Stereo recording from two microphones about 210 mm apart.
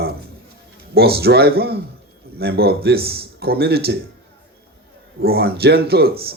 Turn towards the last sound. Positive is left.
turn(degrees=-50)  # may be behind; listen again after turning